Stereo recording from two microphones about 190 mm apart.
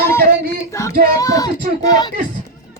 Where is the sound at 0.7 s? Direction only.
15° left (ahead or behind).